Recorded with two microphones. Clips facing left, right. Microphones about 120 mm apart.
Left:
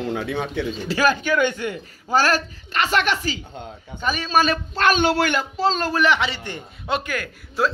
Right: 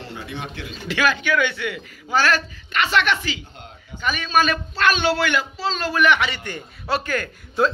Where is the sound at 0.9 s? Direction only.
40° left (ahead or behind).